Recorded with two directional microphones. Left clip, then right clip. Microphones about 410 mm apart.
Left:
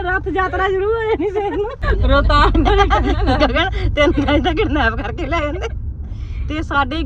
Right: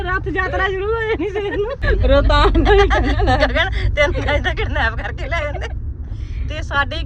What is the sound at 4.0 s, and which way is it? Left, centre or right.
Speech, left.